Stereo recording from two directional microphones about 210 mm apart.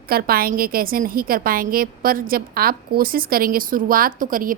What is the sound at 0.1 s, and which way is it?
A woman's voice, 45° right (ahead or behind).